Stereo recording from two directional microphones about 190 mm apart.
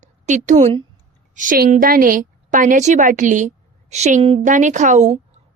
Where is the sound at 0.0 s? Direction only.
40° right (ahead or behind).